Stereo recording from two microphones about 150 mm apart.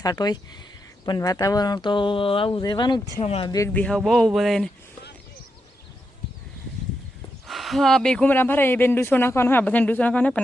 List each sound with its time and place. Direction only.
0.0 s speech: 25° left (ahead or behind)
3.7 s speech: 10° left (ahead or behind)
7.4 s speech: centre (ahead or behind)